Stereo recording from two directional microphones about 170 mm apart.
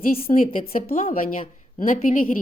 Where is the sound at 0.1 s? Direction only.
55° left (ahead or behind).